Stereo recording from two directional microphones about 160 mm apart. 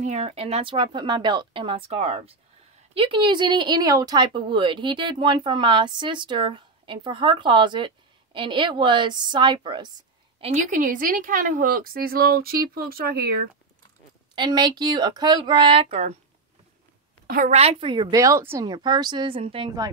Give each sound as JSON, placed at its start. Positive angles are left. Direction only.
{"t": 0.0, "sound": "speech", "side_deg": -40}
{"t": 10.5, "sound": "speech", "side_deg": -55}
{"t": 14.3, "sound": "speech", "side_deg": -30}
{"t": 17.5, "sound": "speech", "side_deg": -40}
{"t": 18.1, "sound": "speech", "side_deg": -20}